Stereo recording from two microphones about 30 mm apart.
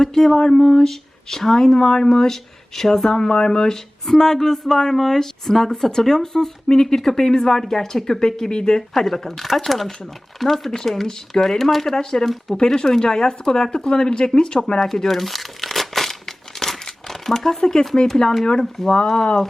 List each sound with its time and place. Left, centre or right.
0.3 s speech: left
3.1 s speech: left
8.9 s speech: centre
12.5 s speech: left
14.8 s crumpling: centre
17.6 s speech: left